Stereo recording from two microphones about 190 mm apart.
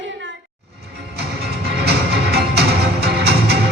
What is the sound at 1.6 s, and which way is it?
Music, 60° right (ahead or behind).